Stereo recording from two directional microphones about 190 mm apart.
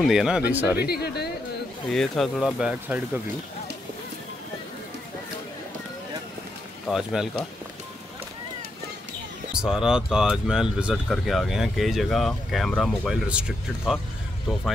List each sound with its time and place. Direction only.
0.0 s speech: centre (ahead or behind)
1.0 s speech: 55° left (ahead or behind)
1.9 s speech: centre (ahead or behind)
6.9 s speech: centre (ahead or behind)
9.5 s speech: 5° right (ahead or behind)